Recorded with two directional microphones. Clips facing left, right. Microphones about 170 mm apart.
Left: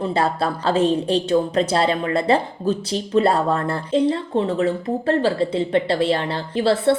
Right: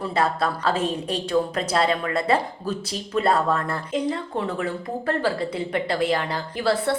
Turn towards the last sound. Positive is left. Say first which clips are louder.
# left 5 dB
turn(degrees=25)  # may be behind; listen again after turning